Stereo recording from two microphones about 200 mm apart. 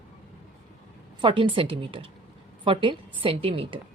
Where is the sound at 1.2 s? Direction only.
25° right (ahead or behind).